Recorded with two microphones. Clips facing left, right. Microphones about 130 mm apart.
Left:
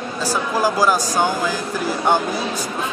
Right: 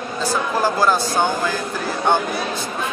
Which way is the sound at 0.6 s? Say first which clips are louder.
Left 1 dB; 10° left (ahead or behind).